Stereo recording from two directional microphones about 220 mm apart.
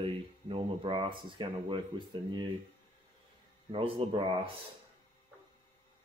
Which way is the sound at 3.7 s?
25° right (ahead or behind).